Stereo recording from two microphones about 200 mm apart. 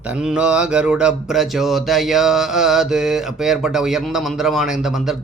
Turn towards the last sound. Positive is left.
turn(degrees=0)  # may be behind; listen again after turning